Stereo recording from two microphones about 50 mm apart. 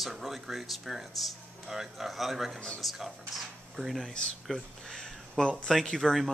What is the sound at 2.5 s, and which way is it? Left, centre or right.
Speech, centre.